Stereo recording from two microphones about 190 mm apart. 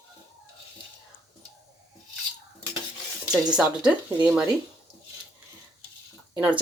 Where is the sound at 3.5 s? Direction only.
5° right (ahead or behind).